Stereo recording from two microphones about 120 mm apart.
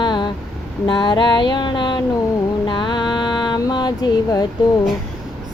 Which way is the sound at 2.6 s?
40° left (ahead or behind).